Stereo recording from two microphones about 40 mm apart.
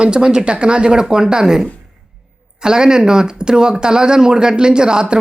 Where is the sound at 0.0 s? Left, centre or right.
Right.